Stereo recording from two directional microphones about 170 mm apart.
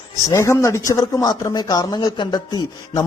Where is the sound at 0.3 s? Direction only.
15° left (ahead or behind).